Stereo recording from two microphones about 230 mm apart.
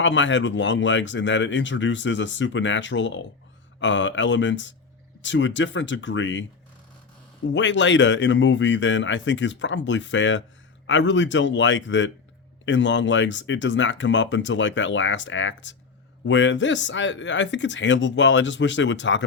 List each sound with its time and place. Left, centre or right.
0.0 s speech: left
7.5 s speech: left